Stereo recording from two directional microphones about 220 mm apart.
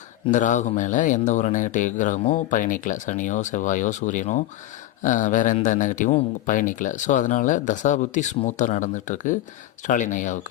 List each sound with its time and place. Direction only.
0.3 s speech: 35° left (ahead or behind)